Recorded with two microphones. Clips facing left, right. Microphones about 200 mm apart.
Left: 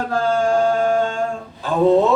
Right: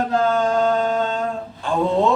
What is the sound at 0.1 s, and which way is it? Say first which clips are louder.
Chant: left 3 dB; 20° right (ahead or behind).